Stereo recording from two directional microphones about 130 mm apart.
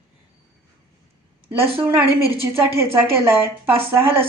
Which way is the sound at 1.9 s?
20° right (ahead or behind).